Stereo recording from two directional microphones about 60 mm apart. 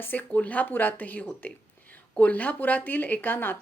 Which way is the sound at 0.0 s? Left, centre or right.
Left.